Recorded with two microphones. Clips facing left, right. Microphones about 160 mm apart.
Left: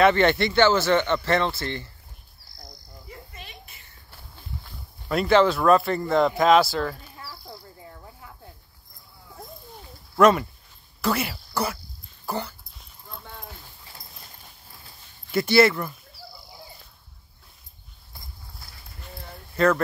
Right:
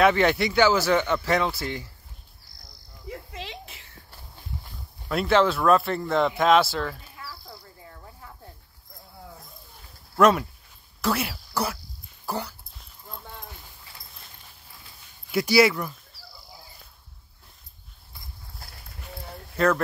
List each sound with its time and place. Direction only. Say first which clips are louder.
0.0 s speech: left 1 dB; 5° right (ahead or behind)
3.1 s cricket: right 8 dB; 90° right
5.0 s speech: left 2 dB; centre (ahead or behind)
7.2 s a sound: left 2 dB; 20° left (ahead or behind)
10.1 s speech: left 2 dB; centre (ahead or behind)
12.3 s dog: left 1 dB; centre (ahead or behind)
15.3 s speech: left 1 dB; 5° right (ahead or behind)
19.5 s speech: left 2 dB; centre (ahead or behind)